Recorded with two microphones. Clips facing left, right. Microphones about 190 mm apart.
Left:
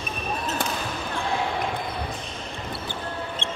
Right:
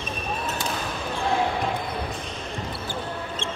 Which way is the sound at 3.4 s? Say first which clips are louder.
Right 1 dB; 60° left (ahead or behind).